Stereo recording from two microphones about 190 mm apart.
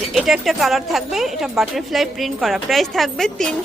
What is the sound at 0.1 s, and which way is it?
A woman's voice, centre (ahead or behind).